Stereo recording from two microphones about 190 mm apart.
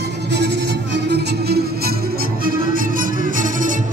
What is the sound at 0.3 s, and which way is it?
Music, 65° right (ahead or behind).